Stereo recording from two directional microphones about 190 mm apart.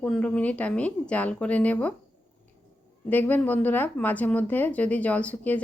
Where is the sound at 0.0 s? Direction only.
5° left (ahead or behind).